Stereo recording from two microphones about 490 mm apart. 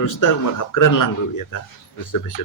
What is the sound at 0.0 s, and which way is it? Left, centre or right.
Speech, left.